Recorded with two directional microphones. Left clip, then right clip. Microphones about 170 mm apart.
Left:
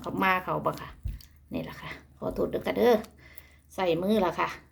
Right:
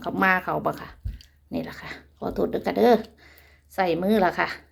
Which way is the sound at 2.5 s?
55° right (ahead or behind).